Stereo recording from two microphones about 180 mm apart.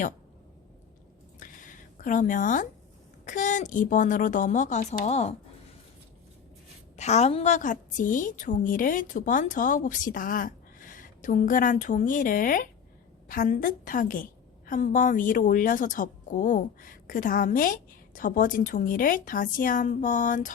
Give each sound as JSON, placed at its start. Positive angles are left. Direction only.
{"t": 1.4, "sound": "a sound", "side_deg": 50}
{"t": 3.2, "sound": "a woman's voice", "side_deg": 45}
{"t": 6.9, "sound": "a woman's voice", "side_deg": 40}